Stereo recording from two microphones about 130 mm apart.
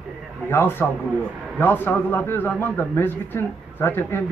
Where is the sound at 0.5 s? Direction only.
15° left (ahead or behind).